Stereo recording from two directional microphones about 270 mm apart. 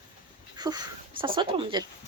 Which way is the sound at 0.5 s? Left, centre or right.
Centre.